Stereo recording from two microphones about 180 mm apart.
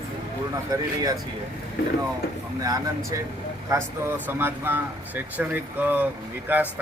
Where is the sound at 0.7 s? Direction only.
20° right (ahead or behind).